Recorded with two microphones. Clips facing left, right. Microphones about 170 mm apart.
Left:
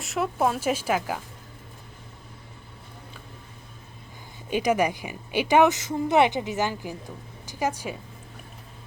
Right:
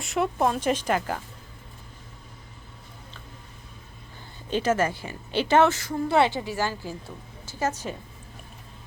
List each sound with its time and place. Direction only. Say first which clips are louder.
0.0 s speech: right 1 dB; centre (ahead or behind)
4.4 s a woman's voice: left 1 dB; 15° left (ahead or behind)